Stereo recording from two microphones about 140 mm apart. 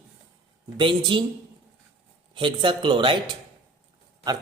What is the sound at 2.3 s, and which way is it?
Speech, 35° right (ahead or behind).